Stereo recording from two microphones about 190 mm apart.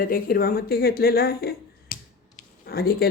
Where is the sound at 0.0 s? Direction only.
50° left (ahead or behind).